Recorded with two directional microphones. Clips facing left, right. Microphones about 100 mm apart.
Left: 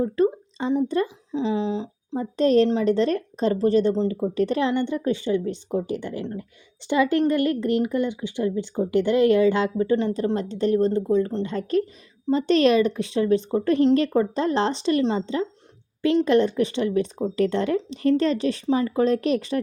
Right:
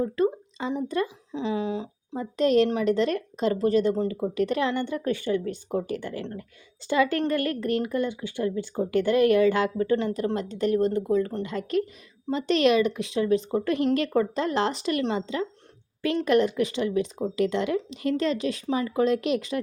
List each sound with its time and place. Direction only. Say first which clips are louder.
0.0 s speech: left 3 dB; 25° left (ahead or behind)
4.7 s speech: left 4 dB; 20° left (ahead or behind)